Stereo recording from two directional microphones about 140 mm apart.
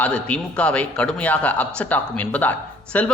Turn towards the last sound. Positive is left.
turn(degrees=10)  # may be behind; listen again after turning